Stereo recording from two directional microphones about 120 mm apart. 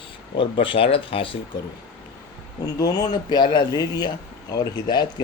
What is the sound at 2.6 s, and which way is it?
Speech, 30° left (ahead or behind).